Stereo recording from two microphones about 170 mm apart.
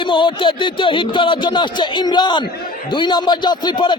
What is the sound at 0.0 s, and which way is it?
A man's voice, 30° left (ahead or behind).